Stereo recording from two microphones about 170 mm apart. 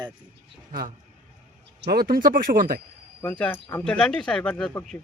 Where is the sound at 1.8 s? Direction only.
65° right (ahead or behind).